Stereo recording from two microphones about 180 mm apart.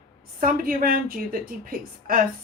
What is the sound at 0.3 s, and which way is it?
A woman's voice, 50° right (ahead or behind).